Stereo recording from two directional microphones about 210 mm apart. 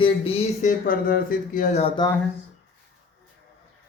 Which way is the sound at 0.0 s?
25° left (ahead or behind).